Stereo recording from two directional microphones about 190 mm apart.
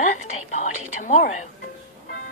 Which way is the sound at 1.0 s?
40° left (ahead or behind).